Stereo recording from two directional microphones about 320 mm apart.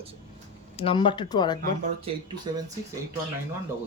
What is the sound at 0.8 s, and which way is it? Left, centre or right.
Speech, centre.